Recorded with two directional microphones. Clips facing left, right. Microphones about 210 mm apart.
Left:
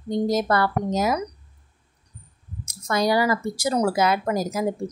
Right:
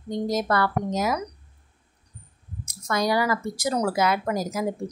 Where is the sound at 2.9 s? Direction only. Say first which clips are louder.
Left 2 dB; 30° left (ahead or behind).